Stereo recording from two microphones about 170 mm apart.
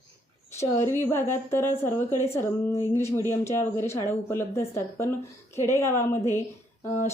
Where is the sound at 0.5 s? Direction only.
15° left (ahead or behind).